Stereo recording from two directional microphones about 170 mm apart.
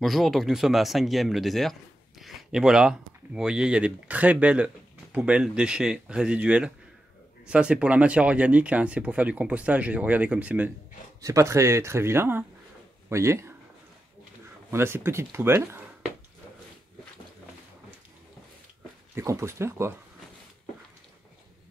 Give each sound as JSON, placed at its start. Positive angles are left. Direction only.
{"t": 0.0, "sound": "speech", "side_deg": 0}
{"t": 14.7, "sound": "speech", "side_deg": -15}
{"t": 19.1, "sound": "speech", "side_deg": -15}